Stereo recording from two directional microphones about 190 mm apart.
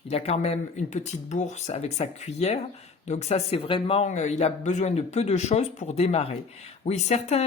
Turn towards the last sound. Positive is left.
turn(degrees=35)  # may be behind; listen again after turning